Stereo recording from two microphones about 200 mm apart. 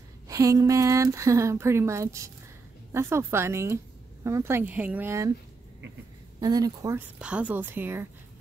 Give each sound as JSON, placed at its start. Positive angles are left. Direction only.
{"t": 0.3, "sound": "a woman's voice", "side_deg": -15}
{"t": 6.4, "sound": "a woman's voice", "side_deg": -20}
{"t": 7.2, "sound": "a woman's voice", "side_deg": -5}